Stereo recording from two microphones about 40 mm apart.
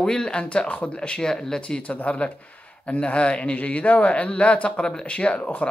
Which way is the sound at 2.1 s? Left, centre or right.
Left.